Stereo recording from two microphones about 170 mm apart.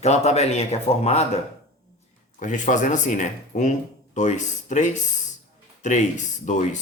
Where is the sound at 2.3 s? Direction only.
50° left (ahead or behind).